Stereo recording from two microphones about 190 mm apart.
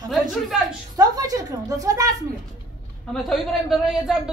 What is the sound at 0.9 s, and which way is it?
A woman's voice, 20° right (ahead or behind).